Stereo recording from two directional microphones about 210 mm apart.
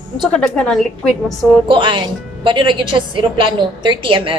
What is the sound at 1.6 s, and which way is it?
A woman's voice, 25° right (ahead or behind).